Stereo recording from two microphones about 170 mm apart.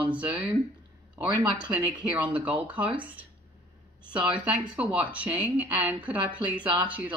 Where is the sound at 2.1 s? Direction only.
10° right (ahead or behind).